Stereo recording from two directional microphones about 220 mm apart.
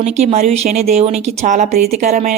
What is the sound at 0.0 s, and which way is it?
A woman's voice, 30° right (ahead or behind).